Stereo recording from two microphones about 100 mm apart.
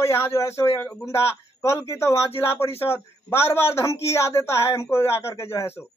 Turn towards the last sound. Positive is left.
turn(degrees=25)  # may be behind; listen again after turning